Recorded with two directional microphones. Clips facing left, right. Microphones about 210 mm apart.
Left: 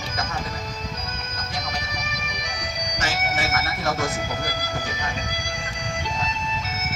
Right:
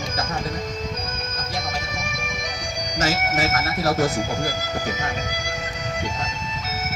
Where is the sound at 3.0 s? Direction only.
40° right (ahead or behind).